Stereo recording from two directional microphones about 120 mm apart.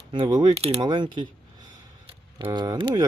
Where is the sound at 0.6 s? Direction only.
60° right (ahead or behind).